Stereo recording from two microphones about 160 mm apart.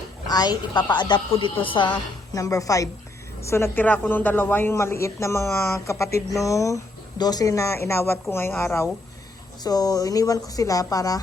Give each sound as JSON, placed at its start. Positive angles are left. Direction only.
{"t": 0.3, "sound": "a woman's voice", "side_deg": 25}